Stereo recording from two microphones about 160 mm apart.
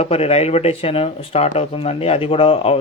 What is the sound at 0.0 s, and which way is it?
Speech, 40° left (ahead or behind).